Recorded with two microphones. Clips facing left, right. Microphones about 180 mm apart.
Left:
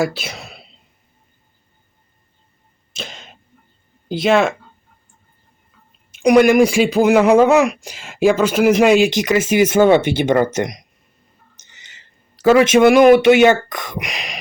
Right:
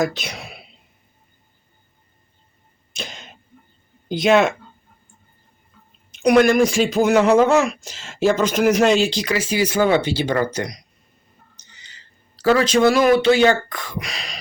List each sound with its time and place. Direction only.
0.0 s speech: 5° left (ahead or behind)
2.9 s cough: centre (ahead or behind)
4.1 s speech: centre (ahead or behind)
6.1 s speech: 10° left (ahead or behind)